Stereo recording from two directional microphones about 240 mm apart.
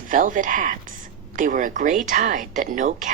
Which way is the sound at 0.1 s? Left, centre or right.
Right.